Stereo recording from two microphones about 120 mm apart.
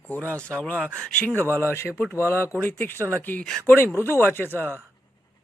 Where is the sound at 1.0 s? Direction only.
10° left (ahead or behind).